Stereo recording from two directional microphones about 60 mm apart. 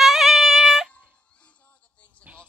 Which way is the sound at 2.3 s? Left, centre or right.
Right.